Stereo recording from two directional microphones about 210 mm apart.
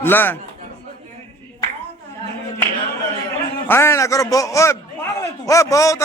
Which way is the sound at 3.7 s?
10° left (ahead or behind).